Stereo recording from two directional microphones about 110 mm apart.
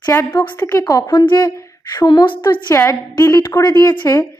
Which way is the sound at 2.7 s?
25° left (ahead or behind).